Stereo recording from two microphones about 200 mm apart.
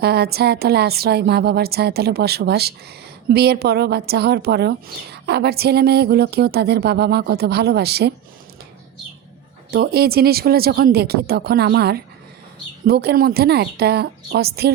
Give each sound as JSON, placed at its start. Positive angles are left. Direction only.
{"t": 0.0, "sound": "speech", "side_deg": -50}
{"t": 9.7, "sound": "speech", "side_deg": -50}